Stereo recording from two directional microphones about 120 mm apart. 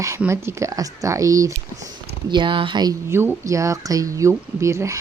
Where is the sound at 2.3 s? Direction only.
45° right (ahead or behind).